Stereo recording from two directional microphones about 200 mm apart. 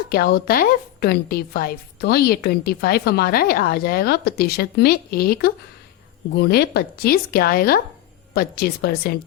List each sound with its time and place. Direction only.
0.1 s a woman's voice: 50° left (ahead or behind)